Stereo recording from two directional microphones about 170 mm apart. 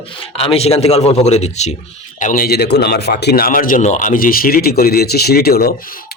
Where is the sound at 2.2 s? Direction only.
55° left (ahead or behind).